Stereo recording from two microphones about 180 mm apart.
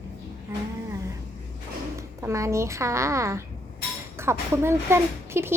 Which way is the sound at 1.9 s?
15° right (ahead or behind).